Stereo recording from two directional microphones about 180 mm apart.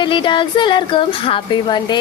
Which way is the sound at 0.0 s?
25° left (ahead or behind).